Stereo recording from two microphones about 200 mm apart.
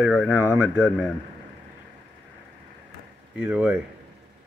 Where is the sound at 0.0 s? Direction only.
5° right (ahead or behind).